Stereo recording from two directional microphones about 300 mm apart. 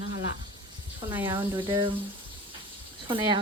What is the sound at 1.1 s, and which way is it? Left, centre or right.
Speech, centre.